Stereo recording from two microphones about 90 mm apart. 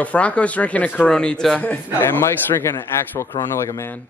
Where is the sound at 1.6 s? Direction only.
25° left (ahead or behind).